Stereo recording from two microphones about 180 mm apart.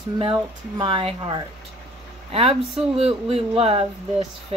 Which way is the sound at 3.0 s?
35° right (ahead or behind).